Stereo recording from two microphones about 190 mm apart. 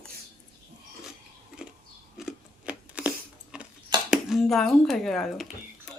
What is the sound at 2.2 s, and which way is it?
Scissors, 5° right (ahead or behind).